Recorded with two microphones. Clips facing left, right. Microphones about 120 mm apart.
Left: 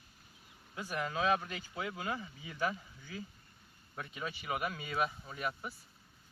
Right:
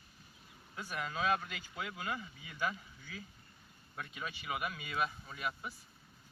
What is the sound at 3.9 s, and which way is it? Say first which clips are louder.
Speech: left 2 dB; 25° left (ahead or behind).